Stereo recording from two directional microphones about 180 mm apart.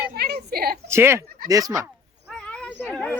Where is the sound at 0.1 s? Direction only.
65° right (ahead or behind).